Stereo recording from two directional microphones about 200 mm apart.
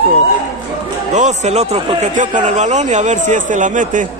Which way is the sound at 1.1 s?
35° right (ahead or behind).